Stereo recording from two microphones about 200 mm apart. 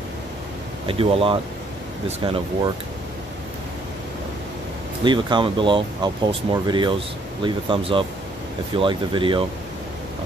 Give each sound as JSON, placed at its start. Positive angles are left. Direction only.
{"t": 0.8, "sound": "speech", "side_deg": -25}
{"t": 5.0, "sound": "speech", "side_deg": -25}